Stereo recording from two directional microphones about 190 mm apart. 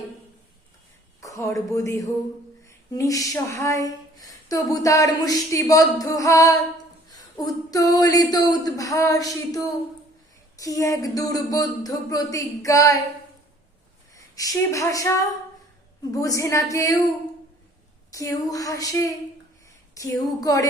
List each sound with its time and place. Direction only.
1.2 s speech: 15° left (ahead or behind)
14.2 s a woman's voice: 20° left (ahead or behind)
16.1 s speech: 15° left (ahead or behind)
18.1 s speech: 15° left (ahead or behind)